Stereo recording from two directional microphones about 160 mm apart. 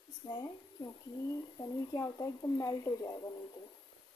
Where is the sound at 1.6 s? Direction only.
20° left (ahead or behind).